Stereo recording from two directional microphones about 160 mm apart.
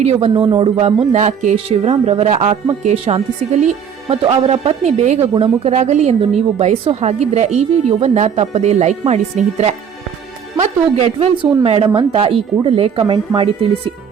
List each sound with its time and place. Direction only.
0.0 s a woman's voice: 45° right (ahead or behind)